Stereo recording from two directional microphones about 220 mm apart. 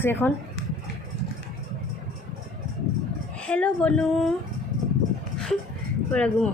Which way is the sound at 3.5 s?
5° left (ahead or behind).